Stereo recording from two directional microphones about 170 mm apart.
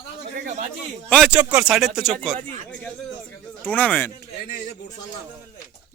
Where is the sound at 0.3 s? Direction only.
45° right (ahead or behind).